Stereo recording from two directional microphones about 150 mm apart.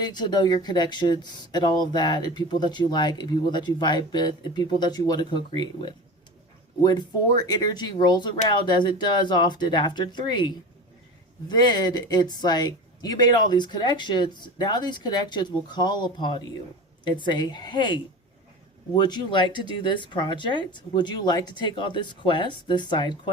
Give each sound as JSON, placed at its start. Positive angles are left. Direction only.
{"t": 0.0, "sound": "speech", "side_deg": 30}
{"t": 7.4, "sound": "speech", "side_deg": 25}